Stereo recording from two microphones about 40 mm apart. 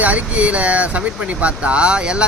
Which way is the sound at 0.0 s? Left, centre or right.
Right.